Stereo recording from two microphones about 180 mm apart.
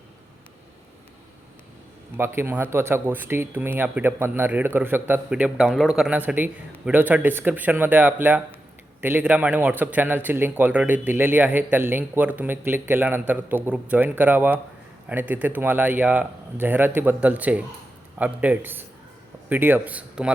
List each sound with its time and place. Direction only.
2.1 s speech: 15° right (ahead or behind)